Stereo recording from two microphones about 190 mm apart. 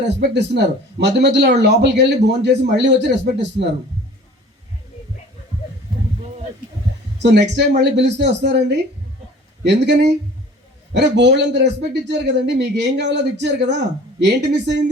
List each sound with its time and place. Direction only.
0.0 s a man's voice: 65° right (ahead or behind)
7.2 s a man's voice: 65° right (ahead or behind)